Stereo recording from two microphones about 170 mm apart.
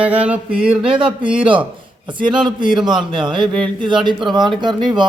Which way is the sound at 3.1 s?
30° right (ahead or behind).